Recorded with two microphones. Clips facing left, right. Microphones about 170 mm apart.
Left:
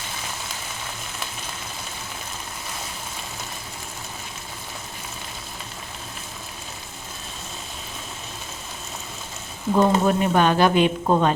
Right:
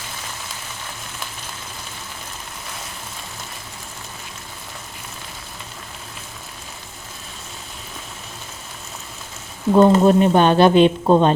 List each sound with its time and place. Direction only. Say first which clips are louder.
9.7 s a woman's voice: right 6 dB; 25° right (ahead or behind)